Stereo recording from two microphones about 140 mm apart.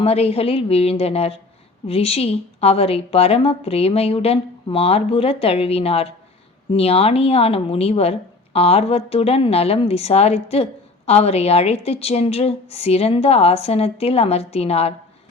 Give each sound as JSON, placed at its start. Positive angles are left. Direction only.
{"t": 0.0, "sound": "a woman's voice", "side_deg": 45}